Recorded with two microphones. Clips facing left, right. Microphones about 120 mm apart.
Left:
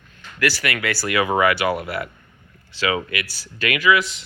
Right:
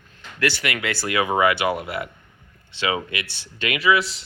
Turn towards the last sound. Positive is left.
turn(degrees=-30)  # may be behind; listen again after turning